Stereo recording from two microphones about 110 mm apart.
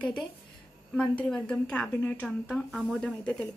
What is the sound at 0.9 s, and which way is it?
Speech, 10° left (ahead or behind).